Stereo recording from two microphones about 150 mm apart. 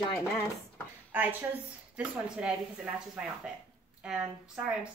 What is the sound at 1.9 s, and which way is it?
A woman's voice, 5° right (ahead or behind).